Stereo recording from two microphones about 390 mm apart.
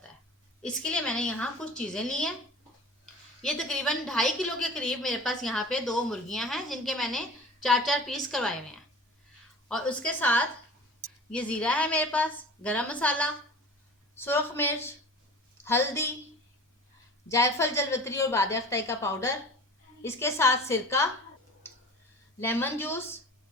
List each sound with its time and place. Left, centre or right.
0.6 s a woman's voice: centre
3.4 s a woman's voice: centre
17.2 s a woman's voice: centre
22.4 s a woman's voice: centre